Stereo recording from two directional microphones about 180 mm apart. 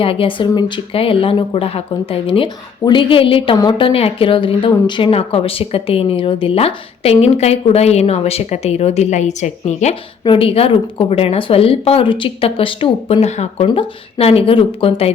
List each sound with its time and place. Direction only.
0.0 s speech: 30° left (ahead or behind)